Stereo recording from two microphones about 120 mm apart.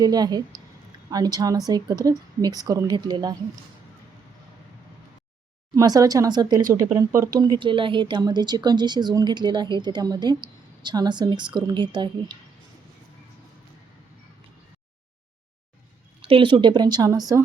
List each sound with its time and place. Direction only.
0.0 s speech: 35° right (ahead or behind)
5.7 s speech: 30° right (ahead or behind)
7.3 s speech: 40° right (ahead or behind)
16.2 s speech: 45° right (ahead or behind); by 17.4 s 30° right (ahead or behind)